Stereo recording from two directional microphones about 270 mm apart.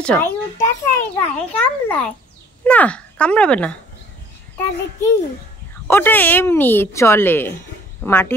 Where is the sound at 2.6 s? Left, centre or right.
Centre.